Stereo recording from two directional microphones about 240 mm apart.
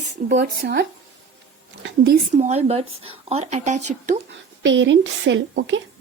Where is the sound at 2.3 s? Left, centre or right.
Right.